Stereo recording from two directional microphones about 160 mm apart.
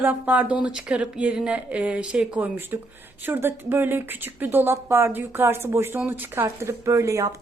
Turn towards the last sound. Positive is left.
turn(degrees=-20)  # may be behind; listen again after turning